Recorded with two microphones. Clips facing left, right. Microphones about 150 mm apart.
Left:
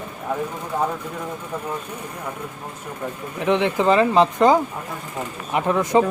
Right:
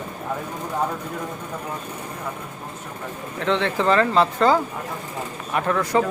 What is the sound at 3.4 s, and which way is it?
Speech, 15° left (ahead or behind).